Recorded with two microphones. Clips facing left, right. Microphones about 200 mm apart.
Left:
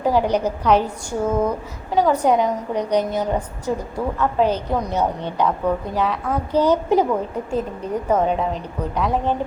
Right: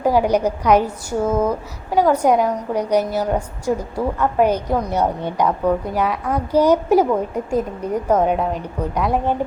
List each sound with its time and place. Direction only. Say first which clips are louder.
0.0 s a woman's voice: right 2 dB; 10° right (ahead or behind)